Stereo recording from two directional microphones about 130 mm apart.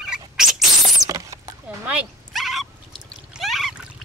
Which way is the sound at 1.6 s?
10° right (ahead or behind).